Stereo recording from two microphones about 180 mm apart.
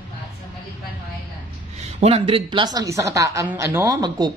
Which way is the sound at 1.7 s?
35° right (ahead or behind).